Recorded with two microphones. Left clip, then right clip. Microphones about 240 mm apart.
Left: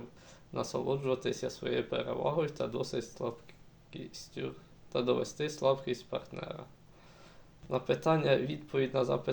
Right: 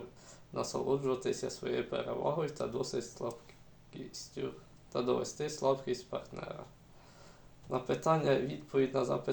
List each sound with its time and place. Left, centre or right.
0.3 s speech: left
4.4 s speech: left
7.7 s speech: left